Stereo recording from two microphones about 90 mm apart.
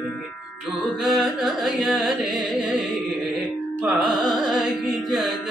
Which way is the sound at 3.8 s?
Centre (ahead or behind).